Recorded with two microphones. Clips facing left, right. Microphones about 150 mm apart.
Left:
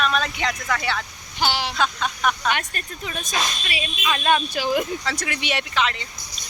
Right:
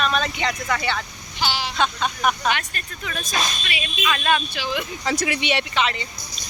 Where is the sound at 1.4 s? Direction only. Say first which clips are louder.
Left 2 dB; 60° left (ahead or behind).